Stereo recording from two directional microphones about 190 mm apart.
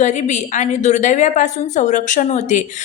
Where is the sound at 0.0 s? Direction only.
40° left (ahead or behind).